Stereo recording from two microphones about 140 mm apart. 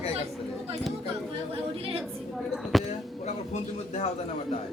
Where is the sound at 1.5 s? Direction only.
45° right (ahead or behind).